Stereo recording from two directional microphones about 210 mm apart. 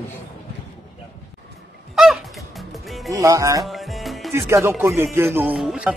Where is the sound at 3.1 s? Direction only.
15° right (ahead or behind).